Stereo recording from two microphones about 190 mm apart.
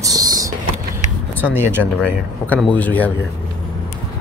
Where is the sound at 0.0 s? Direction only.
20° right (ahead or behind).